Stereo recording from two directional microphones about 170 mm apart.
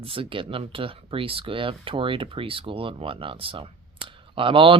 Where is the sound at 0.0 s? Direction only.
30° right (ahead or behind).